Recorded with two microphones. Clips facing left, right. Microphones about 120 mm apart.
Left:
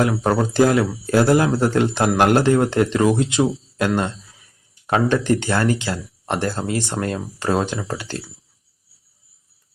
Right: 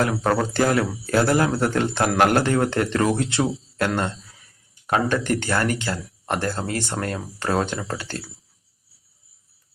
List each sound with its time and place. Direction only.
0.0 s speech: 15° left (ahead or behind)